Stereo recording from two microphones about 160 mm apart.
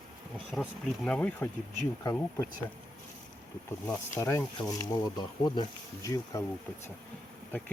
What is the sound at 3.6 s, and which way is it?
Speech, 10° left (ahead or behind).